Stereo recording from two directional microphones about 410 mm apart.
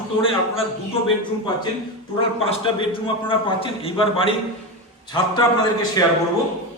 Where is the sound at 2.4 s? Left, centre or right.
Centre.